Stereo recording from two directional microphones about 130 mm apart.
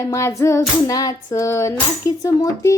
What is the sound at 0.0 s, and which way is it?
Child singing, 20° left (ahead or behind).